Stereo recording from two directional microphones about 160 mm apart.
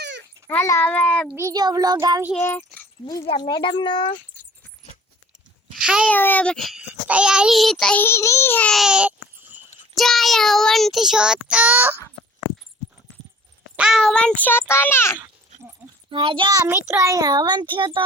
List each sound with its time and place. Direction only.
0.4 s a child's voice: 15° left (ahead or behind)
1.4 s a child's voice: 20° right (ahead or behind)
2.3 s a child's voice: 15° left (ahead or behind)
3.2 s speech: 30° left (ahead or behind)
5.7 s a sound: 5° right (ahead or behind)
6.1 s child singing: 10° left (ahead or behind)
8.0 s a child's voice: 15° left (ahead or behind); by 9.1 s 5° right (ahead or behind)
9.9 s child singing: centre (ahead or behind)
13.7 s a child's voice: 5° right (ahead or behind); by 15.2 s 15° left (ahead or behind)
16.0 s a child's voice: 30° right (ahead or behind)